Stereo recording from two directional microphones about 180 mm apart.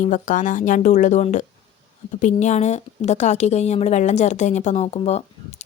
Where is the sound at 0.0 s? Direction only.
45° left (ahead or behind).